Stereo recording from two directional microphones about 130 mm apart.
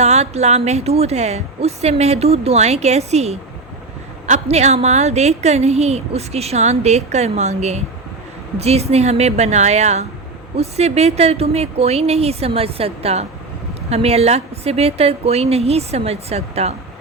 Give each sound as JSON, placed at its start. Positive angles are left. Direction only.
{"t": 0.0, "sound": "a woman's voice", "side_deg": -55}